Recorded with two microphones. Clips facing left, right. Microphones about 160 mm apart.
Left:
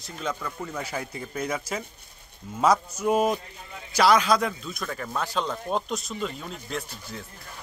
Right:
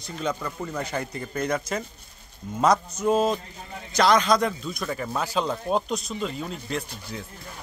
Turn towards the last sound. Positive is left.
turn(degrees=0)  # may be behind; listen again after turning